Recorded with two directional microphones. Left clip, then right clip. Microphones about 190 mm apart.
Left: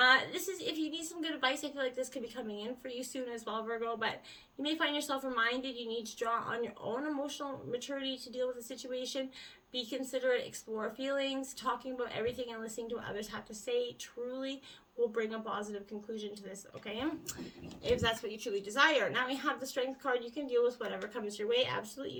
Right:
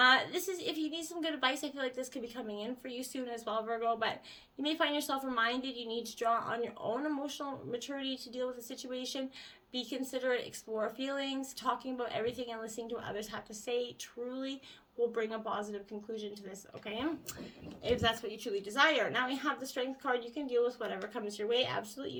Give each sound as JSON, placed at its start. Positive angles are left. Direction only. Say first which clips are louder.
{"t": 0.0, "sound": "a woman's voice", "louder": "even", "side_deg": -30}